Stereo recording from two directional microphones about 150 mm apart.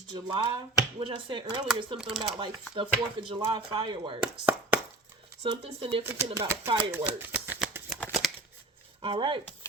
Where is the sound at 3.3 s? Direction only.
30° right (ahead or behind).